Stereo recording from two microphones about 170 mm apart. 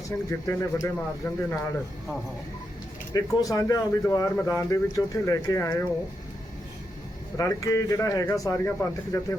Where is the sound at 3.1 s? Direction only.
20° left (ahead or behind).